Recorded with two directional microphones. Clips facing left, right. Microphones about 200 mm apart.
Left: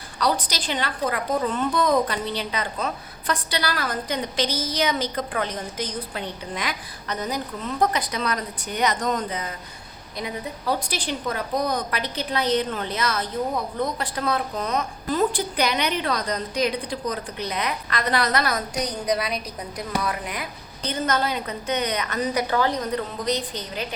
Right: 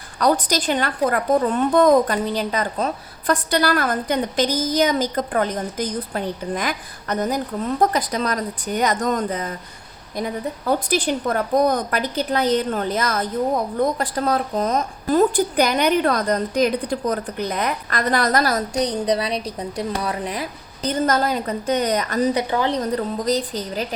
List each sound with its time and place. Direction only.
0.2 s a woman's voice: 50° right (ahead or behind)
22.4 s a woman's voice: 20° right (ahead or behind)
22.7 s a woman's voice: 35° right (ahead or behind)